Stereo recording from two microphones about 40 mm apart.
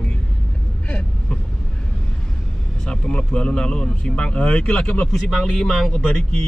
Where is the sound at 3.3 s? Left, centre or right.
Left.